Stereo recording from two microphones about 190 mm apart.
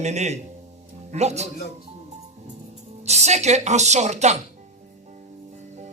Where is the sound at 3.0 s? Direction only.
35° right (ahead or behind).